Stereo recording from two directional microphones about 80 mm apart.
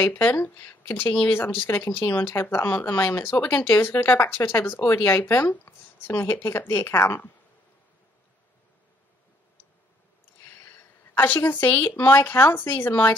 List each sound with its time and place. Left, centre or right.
0.0 s speech: left
11.1 s speech: left